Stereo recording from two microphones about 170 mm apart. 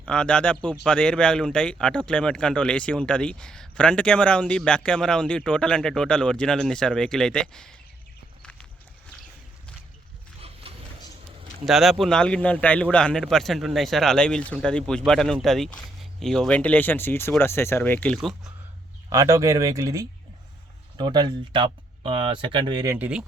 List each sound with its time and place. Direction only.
0.0 s a man's voice: 5° left (ahead or behind)
8.4 s walk: 5° left (ahead or behind)
10.4 s a sound: 35° right (ahead or behind)
11.6 s a man's voice: centre (ahead or behind)
19.1 s speech: 20° right (ahead or behind)
23.0 s speech: 5° right (ahead or behind)